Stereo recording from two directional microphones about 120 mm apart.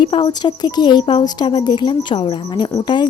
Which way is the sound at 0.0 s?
45° left (ahead or behind).